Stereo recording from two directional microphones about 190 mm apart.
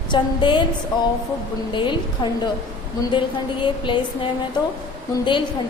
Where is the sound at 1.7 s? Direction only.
25° left (ahead or behind).